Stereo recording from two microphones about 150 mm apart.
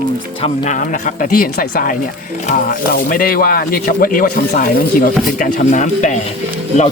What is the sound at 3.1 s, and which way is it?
Speech, 75° left (ahead or behind).